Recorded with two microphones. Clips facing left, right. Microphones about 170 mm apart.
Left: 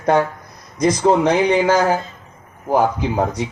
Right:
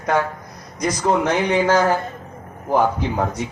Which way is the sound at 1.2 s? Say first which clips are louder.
Left 3 dB; 15° left (ahead or behind).